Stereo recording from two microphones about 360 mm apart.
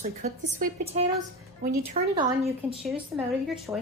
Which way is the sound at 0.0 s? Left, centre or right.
Centre.